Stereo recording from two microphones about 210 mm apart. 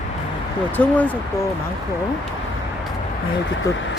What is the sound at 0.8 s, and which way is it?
Speech, 5° left (ahead or behind).